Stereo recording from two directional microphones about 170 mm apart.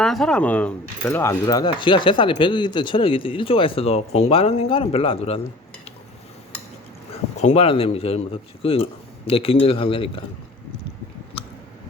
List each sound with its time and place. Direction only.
0.0 s speech: 5° left (ahead or behind); by 5.4 s 35° left (ahead or behind)
7.1 s a man's voice: 40° left (ahead or behind)